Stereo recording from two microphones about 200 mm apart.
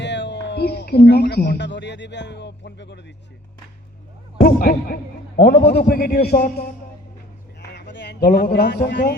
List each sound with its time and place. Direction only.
0.0 s speech: 60° left (ahead or behind)
4.4 s a man's voice: 45° left (ahead or behind)
7.7 s a man's voice: 60° left (ahead or behind)